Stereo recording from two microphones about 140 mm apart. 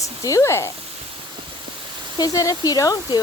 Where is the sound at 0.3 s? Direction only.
20° left (ahead or behind).